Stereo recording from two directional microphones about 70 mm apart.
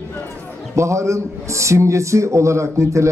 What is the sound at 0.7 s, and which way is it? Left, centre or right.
A man's voice, right.